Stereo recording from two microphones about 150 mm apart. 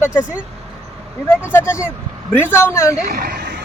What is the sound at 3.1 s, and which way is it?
Speech, 90° right.